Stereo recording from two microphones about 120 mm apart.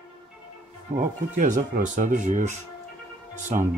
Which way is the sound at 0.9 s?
90° right.